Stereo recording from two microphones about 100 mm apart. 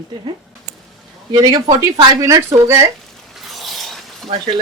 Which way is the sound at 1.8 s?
35° right (ahead or behind).